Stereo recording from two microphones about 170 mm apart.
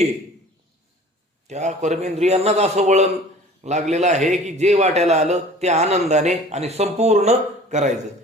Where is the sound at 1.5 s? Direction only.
45° right (ahead or behind).